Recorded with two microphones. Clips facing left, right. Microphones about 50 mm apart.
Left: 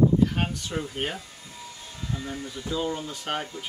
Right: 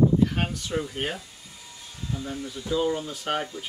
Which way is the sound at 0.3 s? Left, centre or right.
Centre.